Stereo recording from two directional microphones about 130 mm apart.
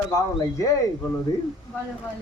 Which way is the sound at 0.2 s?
25° left (ahead or behind).